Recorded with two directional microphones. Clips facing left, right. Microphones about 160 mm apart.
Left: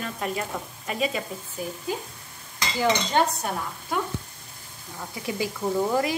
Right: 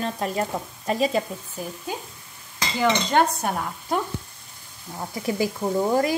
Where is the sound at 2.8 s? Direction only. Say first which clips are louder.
Right 2 dB; 55° right (ahead or behind).